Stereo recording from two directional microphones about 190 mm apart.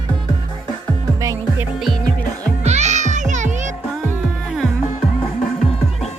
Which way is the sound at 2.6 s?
35° right (ahead or behind).